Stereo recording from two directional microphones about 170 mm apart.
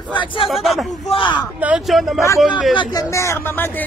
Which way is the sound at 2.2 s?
20° left (ahead or behind).